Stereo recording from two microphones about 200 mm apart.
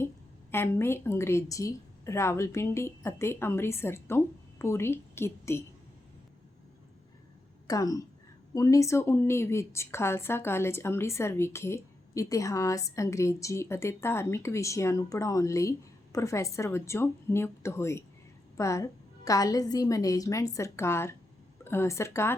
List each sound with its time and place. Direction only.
0.5 s a woman's voice: 10° left (ahead or behind)
7.7 s a woman's voice: 20° left (ahead or behind)